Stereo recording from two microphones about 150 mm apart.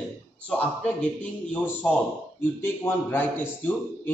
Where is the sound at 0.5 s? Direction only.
10° left (ahead or behind).